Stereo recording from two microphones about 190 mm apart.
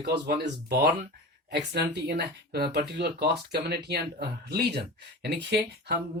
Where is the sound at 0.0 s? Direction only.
60° right (ahead or behind).